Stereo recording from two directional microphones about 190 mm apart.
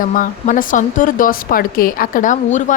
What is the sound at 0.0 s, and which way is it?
A woman's voice, 45° left (ahead or behind).